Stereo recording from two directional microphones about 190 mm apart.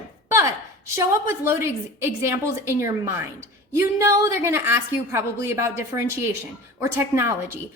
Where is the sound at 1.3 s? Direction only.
15° right (ahead or behind).